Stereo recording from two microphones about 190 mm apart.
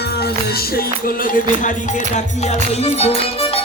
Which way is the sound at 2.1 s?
35° left (ahead or behind).